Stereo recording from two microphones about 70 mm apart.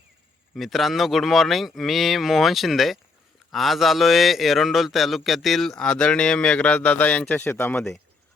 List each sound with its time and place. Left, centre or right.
0.5 s a man's voice: centre; by 7.8 s left